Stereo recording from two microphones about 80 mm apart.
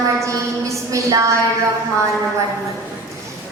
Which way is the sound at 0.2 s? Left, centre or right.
Right.